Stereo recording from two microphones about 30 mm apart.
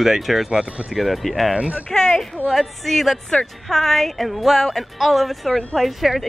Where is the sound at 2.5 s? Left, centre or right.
Centre.